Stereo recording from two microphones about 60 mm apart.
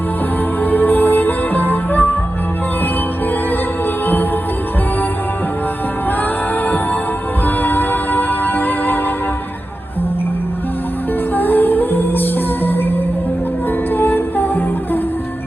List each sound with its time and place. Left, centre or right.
0.6 s music: left
4.0 s music: left
7.4 s music: left
11.3 s music: left
13.9 s music: left